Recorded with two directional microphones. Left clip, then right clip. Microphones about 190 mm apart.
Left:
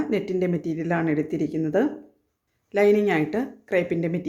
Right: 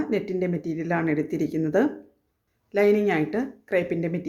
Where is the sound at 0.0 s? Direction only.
5° left (ahead or behind).